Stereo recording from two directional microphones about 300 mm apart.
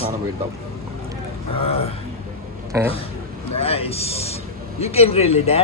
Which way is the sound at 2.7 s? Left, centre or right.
Centre.